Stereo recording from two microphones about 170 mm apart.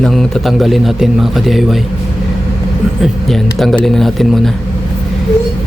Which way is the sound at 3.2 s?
Centre (ahead or behind).